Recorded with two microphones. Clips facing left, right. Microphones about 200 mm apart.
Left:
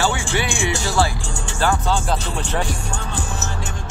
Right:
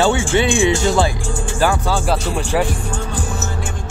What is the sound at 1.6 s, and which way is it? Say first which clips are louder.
Speech: right 2 dB; 10° right (ahead or behind).